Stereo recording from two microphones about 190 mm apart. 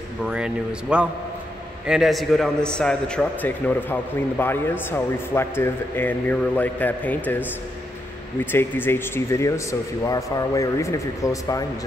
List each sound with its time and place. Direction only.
0.2 s a man's voice: 5° right (ahead or behind)
8.5 s a man's voice: 10° left (ahead or behind)